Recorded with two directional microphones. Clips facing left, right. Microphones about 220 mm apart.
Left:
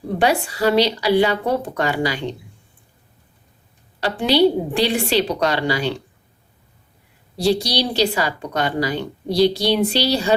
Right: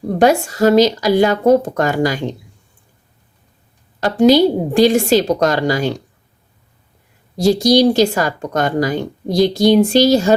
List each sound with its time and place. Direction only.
0.2 s a woman's voice: 45° right (ahead or behind)
4.0 s a woman's voice: 45° right (ahead or behind)
7.3 s a woman's voice: 45° right (ahead or behind)